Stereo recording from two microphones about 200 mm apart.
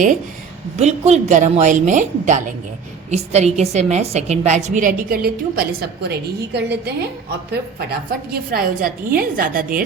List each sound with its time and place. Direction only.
0.8 s a woman's voice: 35° right (ahead or behind)